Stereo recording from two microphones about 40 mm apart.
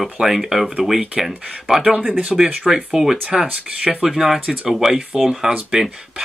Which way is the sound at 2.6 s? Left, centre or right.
Centre.